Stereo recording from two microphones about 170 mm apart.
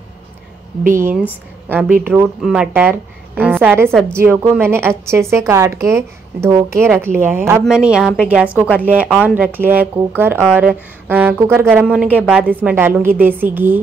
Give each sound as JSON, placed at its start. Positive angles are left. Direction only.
{"t": 0.9, "sound": "speech", "side_deg": -15}
{"t": 2.2, "sound": "a woman's voice", "side_deg": -5}